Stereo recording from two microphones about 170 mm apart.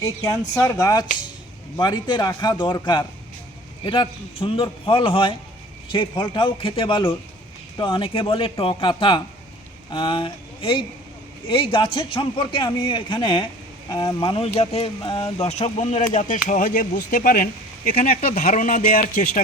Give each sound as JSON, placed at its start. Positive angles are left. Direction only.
{"t": 0.0, "sound": "speech", "side_deg": 20}
{"t": 18.2, "sound": "speech", "side_deg": 40}